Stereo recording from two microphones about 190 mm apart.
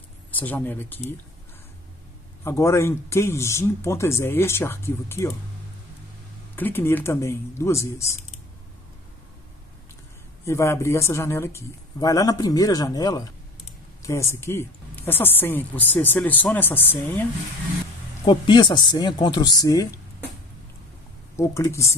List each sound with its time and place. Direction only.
0.4 s speech: 10° left (ahead or behind)
2.4 s speech: 15° left (ahead or behind)
6.5 s speech: 10° left (ahead or behind)
10.4 s speech: 15° left (ahead or behind)
18.2 s speech: 25° left (ahead or behind)
21.4 s speech: 15° left (ahead or behind)